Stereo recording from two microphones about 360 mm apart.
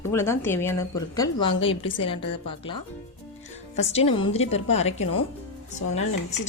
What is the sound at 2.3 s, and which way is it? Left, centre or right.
Speech, centre.